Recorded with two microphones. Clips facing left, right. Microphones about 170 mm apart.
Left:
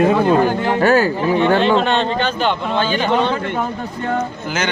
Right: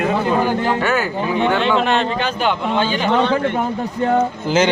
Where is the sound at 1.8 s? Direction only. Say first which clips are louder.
Left 1 dB; 5° right (ahead or behind).